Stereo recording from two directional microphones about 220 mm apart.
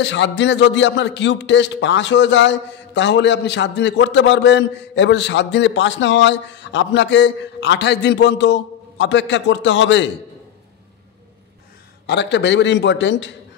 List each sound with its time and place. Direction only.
0.0 s a man's voice: 55° left (ahead or behind)
12.1 s a man's voice: 55° left (ahead or behind)